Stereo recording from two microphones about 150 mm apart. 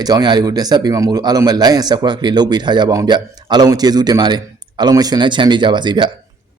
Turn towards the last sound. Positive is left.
turn(degrees=-30)  # may be behind; listen again after turning